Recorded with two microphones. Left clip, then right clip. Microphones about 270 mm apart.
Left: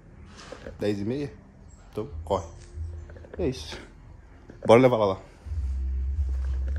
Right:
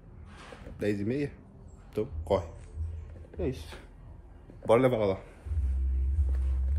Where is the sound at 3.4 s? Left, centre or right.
Left.